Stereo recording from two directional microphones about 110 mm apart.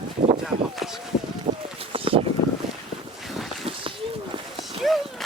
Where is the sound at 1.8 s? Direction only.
55° right (ahead or behind).